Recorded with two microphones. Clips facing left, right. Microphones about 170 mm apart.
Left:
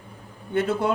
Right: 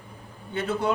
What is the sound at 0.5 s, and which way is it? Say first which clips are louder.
Speech: left 4 dB; 50° left (ahead or behind).